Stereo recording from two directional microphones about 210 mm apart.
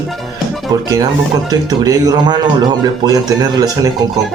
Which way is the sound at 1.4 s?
15° right (ahead or behind).